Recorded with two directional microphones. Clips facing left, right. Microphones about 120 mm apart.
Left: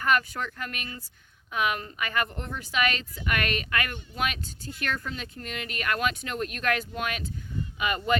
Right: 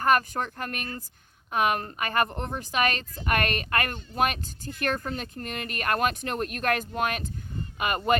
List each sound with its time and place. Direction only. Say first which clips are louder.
0.0 s speech: right 3 dB; 40° right (ahead or behind)